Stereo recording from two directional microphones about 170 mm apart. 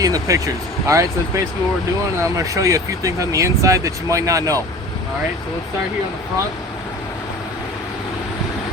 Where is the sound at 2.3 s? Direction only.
20° right (ahead or behind).